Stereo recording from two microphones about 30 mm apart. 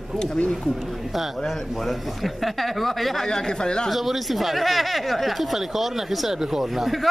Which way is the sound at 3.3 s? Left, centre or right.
Left.